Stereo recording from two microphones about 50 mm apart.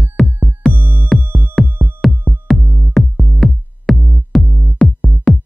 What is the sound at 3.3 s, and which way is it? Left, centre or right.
Music, centre.